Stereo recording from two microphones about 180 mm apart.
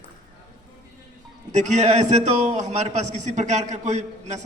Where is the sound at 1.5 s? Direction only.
40° right (ahead or behind).